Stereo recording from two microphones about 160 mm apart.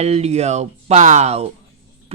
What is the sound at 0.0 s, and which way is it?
Speech, 40° right (ahead or behind).